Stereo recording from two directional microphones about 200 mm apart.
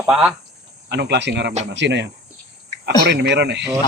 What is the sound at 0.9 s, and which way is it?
Speech, 60° right (ahead or behind).